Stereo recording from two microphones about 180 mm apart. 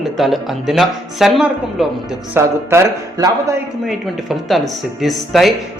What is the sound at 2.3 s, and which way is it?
Speech, 15° right (ahead or behind).